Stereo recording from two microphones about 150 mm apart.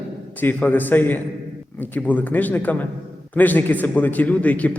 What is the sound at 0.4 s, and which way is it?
A man's voice, 10° left (ahead or behind).